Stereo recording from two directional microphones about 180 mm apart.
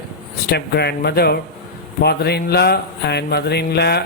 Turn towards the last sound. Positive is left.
turn(degrees=65)  # may be behind; listen again after turning